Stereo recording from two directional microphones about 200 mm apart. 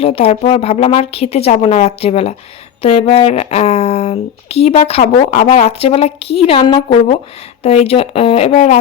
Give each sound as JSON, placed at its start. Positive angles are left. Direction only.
{"t": 0.0, "sound": "speech", "side_deg": 30}